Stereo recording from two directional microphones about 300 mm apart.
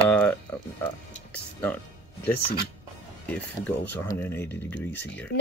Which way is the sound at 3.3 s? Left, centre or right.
Centre.